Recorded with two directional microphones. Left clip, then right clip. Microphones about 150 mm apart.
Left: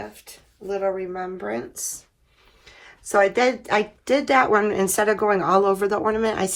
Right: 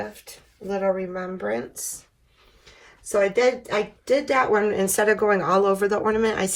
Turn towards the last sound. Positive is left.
turn(degrees=50)  # may be behind; listen again after turning